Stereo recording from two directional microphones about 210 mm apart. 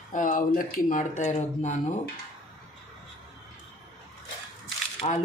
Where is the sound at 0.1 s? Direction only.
40° left (ahead or behind).